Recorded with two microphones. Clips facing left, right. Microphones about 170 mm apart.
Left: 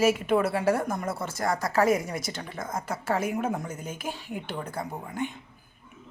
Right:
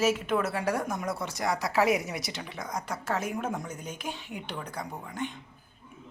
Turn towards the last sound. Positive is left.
turn(degrees=5)  # may be behind; listen again after turning